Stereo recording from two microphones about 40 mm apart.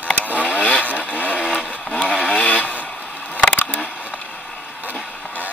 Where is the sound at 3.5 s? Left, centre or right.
Left.